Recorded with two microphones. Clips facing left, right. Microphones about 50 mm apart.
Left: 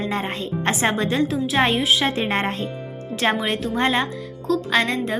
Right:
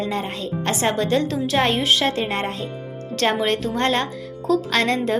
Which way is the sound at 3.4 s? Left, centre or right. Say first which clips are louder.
Right 3 dB; centre.